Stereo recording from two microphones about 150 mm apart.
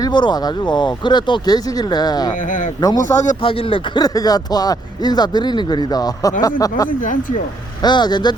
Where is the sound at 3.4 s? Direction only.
35° left (ahead or behind).